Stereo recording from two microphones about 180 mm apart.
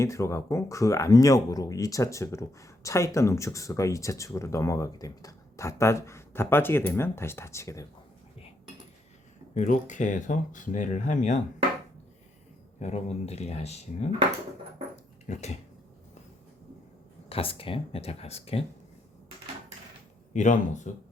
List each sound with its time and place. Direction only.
0.0 s speech: 15° left (ahead or behind)
9.6 s speech: 45° left (ahead or behind)
12.8 s speech: 35° left (ahead or behind)
15.3 s speech: 40° left (ahead or behind)
17.2 s speech: 30° left (ahead or behind)
20.3 s speech: 45° left (ahead or behind)